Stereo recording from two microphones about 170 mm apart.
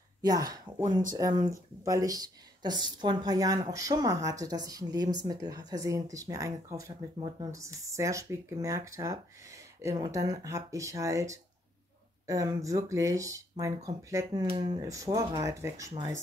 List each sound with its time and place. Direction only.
0.2 s a woman's voice: 20° right (ahead or behind)